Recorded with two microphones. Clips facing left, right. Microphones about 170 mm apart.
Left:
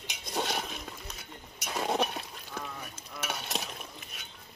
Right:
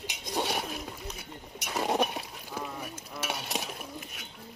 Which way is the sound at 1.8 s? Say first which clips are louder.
Right 2 dB; 10° right (ahead or behind).